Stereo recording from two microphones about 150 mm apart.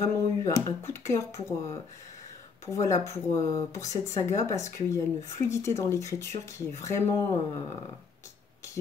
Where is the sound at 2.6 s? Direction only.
20° left (ahead or behind).